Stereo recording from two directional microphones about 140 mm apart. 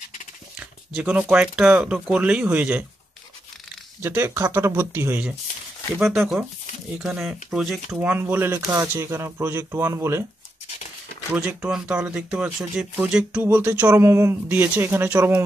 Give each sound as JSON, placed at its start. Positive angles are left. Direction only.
{"t": 0.9, "sound": "speech", "side_deg": -10}
{"t": 4.0, "sound": "speech", "side_deg": -15}
{"t": 5.9, "sound": "speech", "side_deg": -5}
{"t": 8.0, "sound": "speech", "side_deg": -15}
{"t": 11.3, "sound": "speech", "side_deg": -10}